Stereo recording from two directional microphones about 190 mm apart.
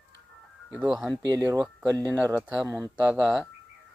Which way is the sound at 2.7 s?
15° right (ahead or behind).